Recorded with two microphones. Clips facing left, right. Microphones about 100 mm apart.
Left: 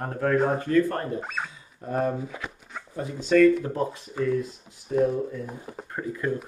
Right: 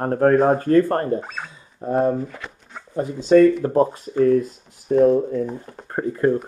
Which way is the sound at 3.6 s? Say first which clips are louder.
Right 10 dB; 40° right (ahead or behind).